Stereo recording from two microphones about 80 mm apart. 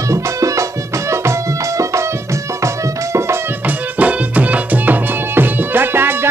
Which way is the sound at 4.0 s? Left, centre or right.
Centre.